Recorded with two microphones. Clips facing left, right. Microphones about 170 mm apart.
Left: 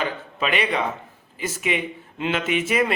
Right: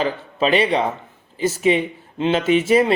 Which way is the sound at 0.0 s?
30° right (ahead or behind).